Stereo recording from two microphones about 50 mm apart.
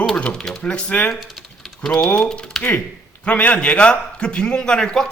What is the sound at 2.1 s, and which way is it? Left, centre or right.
A man's voice, centre.